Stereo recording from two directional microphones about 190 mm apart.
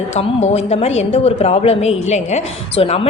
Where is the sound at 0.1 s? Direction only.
35° left (ahead or behind).